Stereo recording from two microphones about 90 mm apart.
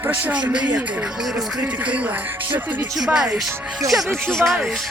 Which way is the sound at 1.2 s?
5° right (ahead or behind).